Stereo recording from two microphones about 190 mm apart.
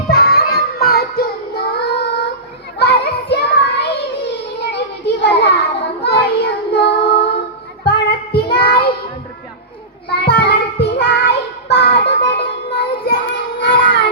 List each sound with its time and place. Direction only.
0.1 s child singing: 55° left (ahead or behind)
2.7 s children playing: 60° left (ahead or behind)
6.0 s child singing: 60° left (ahead or behind)
10.1 s child singing: 60° left (ahead or behind)